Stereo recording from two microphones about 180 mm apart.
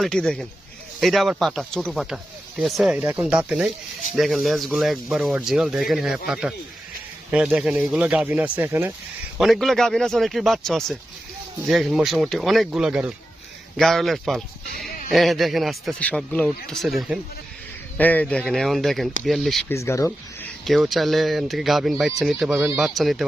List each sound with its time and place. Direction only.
0.0 s speech: 5° left (ahead or behind)
9.4 s speech: centre (ahead or behind)
19.6 s speech: 15° left (ahead or behind)
20.7 s speech: centre (ahead or behind)